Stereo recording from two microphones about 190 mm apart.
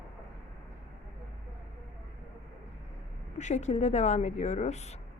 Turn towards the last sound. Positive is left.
turn(degrees=35)  # may be behind; listen again after turning